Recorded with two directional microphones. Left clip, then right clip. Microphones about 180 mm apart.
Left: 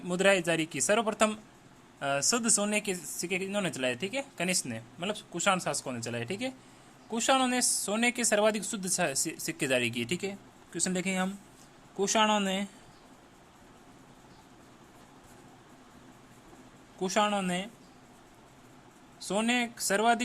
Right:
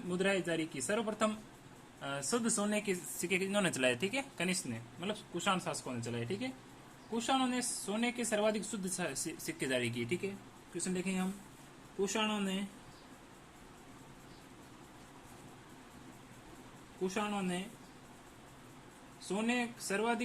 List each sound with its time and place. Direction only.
0.1 s a woman's voice: 45° left (ahead or behind)
2.0 s speech: 35° left (ahead or behind); by 4.4 s 15° left (ahead or behind)
4.4 s a woman's voice: 35° left (ahead or behind); by 12.6 s 60° left (ahead or behind)
17.0 s speech: 60° left (ahead or behind)
19.3 s speech: 65° left (ahead or behind)